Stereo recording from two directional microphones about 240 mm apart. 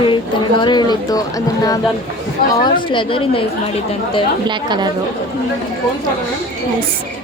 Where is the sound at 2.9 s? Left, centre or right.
Left.